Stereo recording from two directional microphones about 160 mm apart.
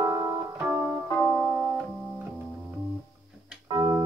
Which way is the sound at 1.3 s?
10° left (ahead or behind).